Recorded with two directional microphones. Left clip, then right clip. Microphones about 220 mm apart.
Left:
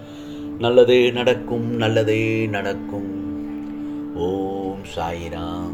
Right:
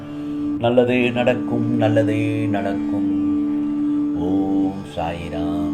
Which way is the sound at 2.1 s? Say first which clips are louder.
Left 2 dB; 5° left (ahead or behind).